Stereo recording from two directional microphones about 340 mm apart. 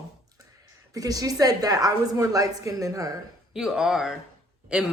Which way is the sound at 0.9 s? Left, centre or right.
Centre.